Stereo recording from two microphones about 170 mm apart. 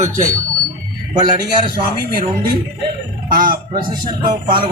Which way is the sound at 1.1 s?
25° right (ahead or behind).